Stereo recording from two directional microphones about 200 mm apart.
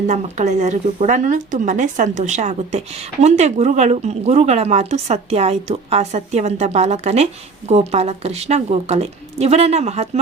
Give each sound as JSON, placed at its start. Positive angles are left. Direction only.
{"t": 0.1, "sound": "speech", "side_deg": -35}